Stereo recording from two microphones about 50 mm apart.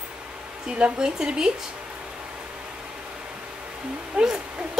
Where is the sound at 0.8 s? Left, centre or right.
Centre.